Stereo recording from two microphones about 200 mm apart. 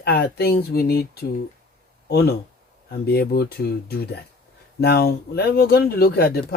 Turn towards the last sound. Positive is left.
turn(degrees=50)  # may be behind; listen again after turning